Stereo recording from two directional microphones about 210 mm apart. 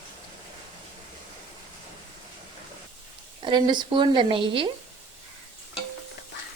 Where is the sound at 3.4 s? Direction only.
25° right (ahead or behind).